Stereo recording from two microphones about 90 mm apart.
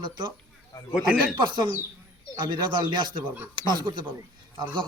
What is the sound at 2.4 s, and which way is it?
A man's voice, 55° right (ahead or behind).